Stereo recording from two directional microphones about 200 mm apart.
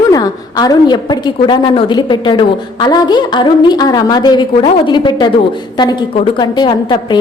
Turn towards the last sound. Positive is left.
turn(degrees=20)  # may be behind; listen again after turning